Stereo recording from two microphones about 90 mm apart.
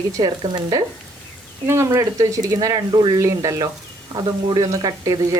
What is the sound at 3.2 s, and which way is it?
Speech, 35° right (ahead or behind).